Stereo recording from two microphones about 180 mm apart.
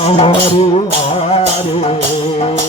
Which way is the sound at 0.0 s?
35° left (ahead or behind).